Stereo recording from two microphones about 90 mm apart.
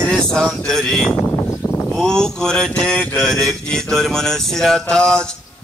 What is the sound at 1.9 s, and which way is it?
Mantra, 5° left (ahead or behind).